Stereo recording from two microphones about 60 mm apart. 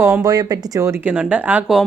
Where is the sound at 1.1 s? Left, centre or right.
Centre.